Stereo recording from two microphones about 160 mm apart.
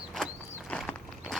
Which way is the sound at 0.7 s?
Centre (ahead or behind).